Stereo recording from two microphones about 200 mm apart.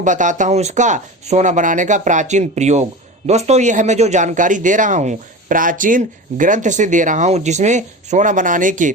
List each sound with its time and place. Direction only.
0.0 s a man's voice: 40° right (ahead or behind)